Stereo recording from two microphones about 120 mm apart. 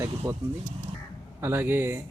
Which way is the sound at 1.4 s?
20° right (ahead or behind).